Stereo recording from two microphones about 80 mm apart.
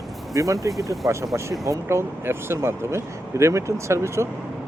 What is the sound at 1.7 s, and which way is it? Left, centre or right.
Speech, right.